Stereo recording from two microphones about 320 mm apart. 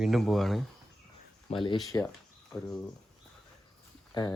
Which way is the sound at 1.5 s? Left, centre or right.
Centre.